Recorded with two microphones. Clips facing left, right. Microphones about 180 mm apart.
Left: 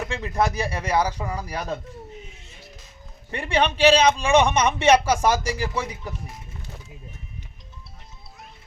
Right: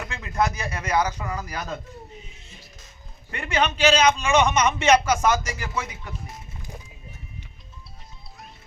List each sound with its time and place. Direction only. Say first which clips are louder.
0.1 s a man's voice: even; 30° left (ahead or behind)
3.3 s a man's voice: left 2 dB; 30° left (ahead or behind)